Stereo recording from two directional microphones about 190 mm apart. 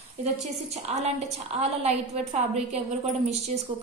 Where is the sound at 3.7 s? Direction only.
25° right (ahead or behind).